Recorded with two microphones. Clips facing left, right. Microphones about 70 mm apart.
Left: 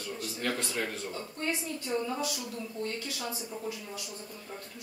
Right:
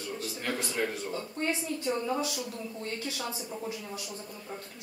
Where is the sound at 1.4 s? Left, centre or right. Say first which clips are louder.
Right 3 dB; right.